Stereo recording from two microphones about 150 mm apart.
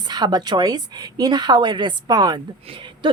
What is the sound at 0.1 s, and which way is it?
A woman's voice, 30° right (ahead or behind).